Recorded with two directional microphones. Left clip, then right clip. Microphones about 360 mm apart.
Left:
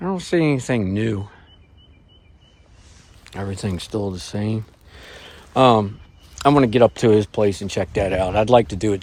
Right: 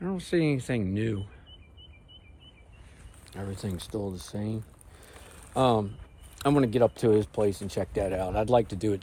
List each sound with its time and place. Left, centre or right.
0.0 s speech: centre
3.2 s speech: centre